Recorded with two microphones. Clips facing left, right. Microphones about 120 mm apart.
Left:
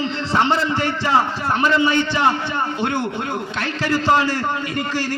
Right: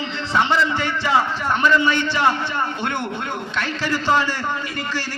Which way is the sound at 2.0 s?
20° left (ahead or behind).